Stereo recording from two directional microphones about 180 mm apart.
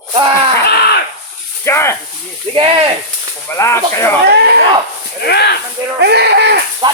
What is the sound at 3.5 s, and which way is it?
Speech, 15° left (ahead or behind).